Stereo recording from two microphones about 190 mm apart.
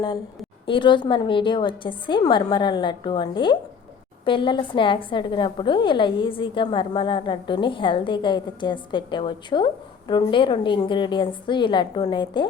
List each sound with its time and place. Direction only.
0.6 s a woman's voice: 25° left (ahead or behind)